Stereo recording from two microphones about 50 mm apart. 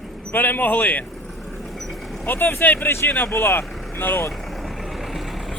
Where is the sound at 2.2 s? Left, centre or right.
Left.